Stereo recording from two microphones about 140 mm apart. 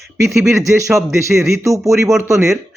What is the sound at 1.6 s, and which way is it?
Speech, 25° right (ahead or behind).